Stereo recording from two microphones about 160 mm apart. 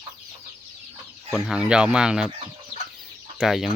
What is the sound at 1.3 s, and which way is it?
Speech, 5° right (ahead or behind).